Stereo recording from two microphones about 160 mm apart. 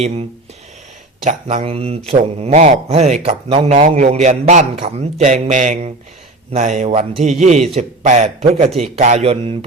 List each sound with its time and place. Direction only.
1.3 s speech: 50° right (ahead or behind)
1.6 s speech: 40° right (ahead or behind)